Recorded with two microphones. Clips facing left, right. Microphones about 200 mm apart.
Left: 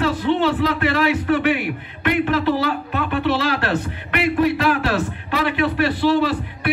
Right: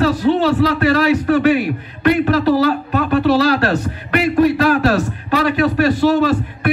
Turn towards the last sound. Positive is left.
turn(degrees=-45)  # may be behind; listen again after turning